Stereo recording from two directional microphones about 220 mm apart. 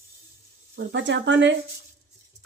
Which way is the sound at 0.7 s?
55° right (ahead or behind).